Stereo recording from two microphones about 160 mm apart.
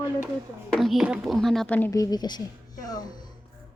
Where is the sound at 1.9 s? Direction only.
25° left (ahead or behind).